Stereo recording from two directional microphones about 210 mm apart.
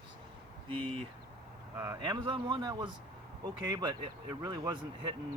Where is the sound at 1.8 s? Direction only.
20° right (ahead or behind).